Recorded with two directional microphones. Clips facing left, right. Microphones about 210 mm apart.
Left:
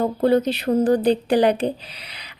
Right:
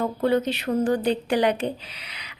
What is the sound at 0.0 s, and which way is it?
A woman's voice, 35° left (ahead or behind).